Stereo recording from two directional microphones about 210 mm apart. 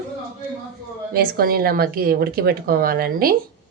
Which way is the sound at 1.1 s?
45° right (ahead or behind).